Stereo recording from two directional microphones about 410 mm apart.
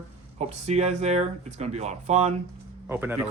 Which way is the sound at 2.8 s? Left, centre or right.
Centre.